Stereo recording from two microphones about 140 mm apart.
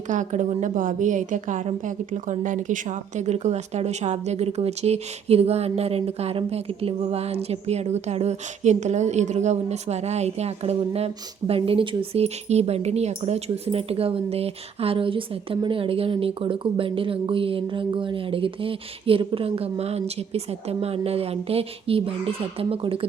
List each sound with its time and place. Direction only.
0.1 s a woman's voice: 60° right (ahead or behind); by 23.0 s 40° right (ahead or behind)